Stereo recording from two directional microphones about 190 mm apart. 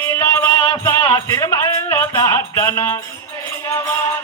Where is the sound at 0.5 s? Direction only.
30° left (ahead or behind).